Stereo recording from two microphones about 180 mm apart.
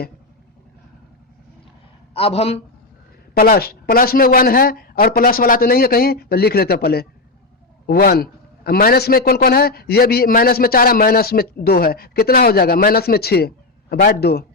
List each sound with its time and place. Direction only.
2.1 s speech: 35° left (ahead or behind)
3.3 s a man's voice: 55° left (ahead or behind)